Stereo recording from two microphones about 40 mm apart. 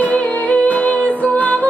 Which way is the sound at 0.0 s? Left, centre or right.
Left.